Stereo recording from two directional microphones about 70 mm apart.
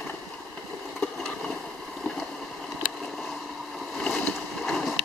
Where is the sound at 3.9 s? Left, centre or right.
Centre.